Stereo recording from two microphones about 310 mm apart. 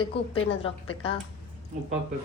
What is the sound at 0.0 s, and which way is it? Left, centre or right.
A woman's voice, centre.